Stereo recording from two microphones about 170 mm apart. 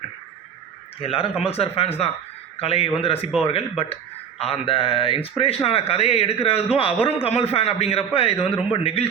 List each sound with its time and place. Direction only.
1.0 s speech: 35° left (ahead or behind)